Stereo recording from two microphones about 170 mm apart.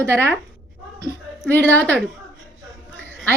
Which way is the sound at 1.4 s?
10° left (ahead or behind).